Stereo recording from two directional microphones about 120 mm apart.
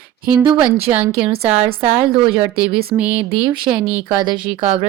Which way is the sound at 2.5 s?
10° right (ahead or behind).